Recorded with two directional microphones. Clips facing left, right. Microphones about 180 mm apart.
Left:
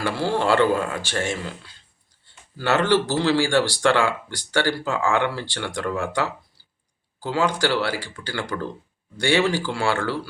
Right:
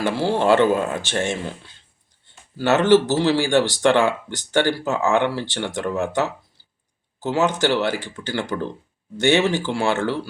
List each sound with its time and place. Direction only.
0.3 s speech: 20° right (ahead or behind)